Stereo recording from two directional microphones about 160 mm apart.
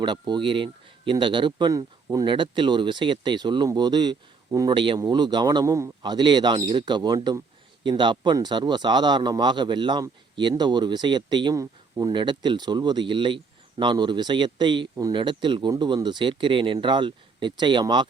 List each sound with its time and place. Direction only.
0.0 s speech: 30° right (ahead or behind)